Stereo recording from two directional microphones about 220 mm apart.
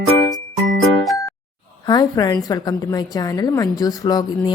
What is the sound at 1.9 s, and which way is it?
A woman's voice, 20° left (ahead or behind).